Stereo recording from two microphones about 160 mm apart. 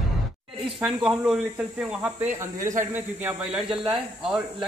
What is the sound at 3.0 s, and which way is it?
Speech, 5° right (ahead or behind).